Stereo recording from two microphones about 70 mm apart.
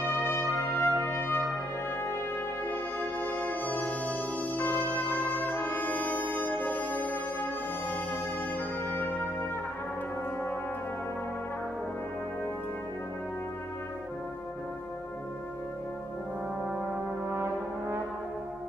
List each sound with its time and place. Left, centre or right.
0.0 s brass instrument: left
2.6 s music: left
17.3 s brass instrument: right